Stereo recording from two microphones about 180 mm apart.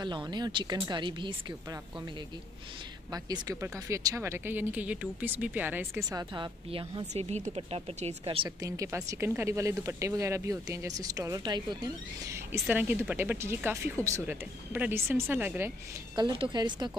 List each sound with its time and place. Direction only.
0.0 s speech: 25° right (ahead or behind)
3.1 s speech: 20° right (ahead or behind)
16.2 s speech: 25° right (ahead or behind)